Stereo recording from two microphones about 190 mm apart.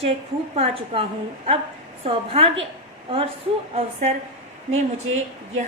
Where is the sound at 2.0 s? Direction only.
30° right (ahead or behind).